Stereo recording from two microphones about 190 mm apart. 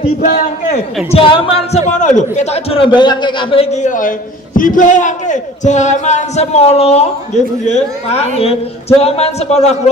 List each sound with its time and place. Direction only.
0.2 s a man's voice: 40° left (ahead or behind)
1.1 s a man's voice: 30° left (ahead or behind)